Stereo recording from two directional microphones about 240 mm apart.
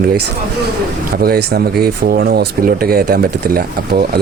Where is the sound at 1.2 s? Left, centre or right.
Right.